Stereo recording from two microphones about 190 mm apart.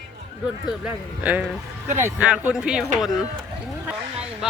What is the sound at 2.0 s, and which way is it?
Speech, 10° right (ahead or behind).